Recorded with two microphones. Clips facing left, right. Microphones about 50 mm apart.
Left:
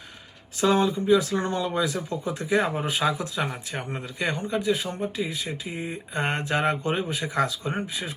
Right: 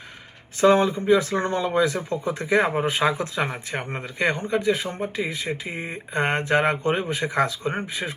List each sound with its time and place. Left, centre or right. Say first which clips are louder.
0.6 s speech: right 4 dB; right